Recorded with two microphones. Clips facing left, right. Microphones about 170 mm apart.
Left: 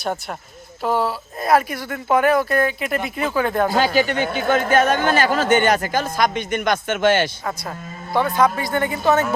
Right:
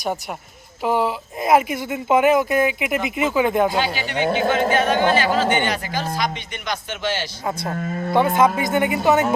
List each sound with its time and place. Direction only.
0.8 s speech: 15° right (ahead or behind)
3.7 s a man's voice: 40° left (ahead or behind)
8.4 s speech: 20° right (ahead or behind)